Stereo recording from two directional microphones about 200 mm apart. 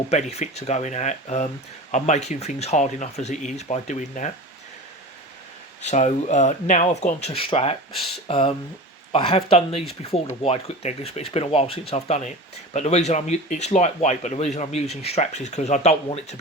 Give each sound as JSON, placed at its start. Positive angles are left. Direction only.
{"t": 0.1, "sound": "speech", "side_deg": 35}
{"t": 5.8, "sound": "speech", "side_deg": 35}